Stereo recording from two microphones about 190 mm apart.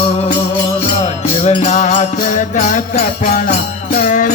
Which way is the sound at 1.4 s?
35° left (ahead or behind).